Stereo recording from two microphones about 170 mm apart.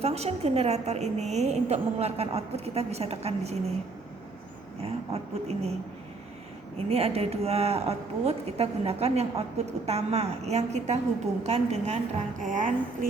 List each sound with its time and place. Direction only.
0.0 s speech: 35° right (ahead or behind)
4.8 s speech: 35° right (ahead or behind)
6.7 s speech: 35° right (ahead or behind)